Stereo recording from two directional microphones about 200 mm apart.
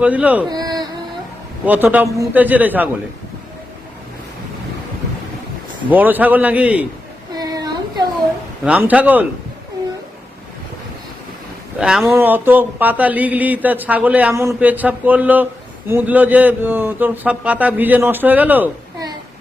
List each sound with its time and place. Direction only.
0.0 s speech: 5° right (ahead or behind)
0.5 s a sound: 20° right (ahead or behind)
1.6 s speech: 10° right (ahead or behind)
5.9 s speech: 10° right (ahead or behind)
7.3 s a sound: 20° right (ahead or behind)
8.6 s speech: 5° right (ahead or behind)
11.8 s speech: 5° right (ahead or behind)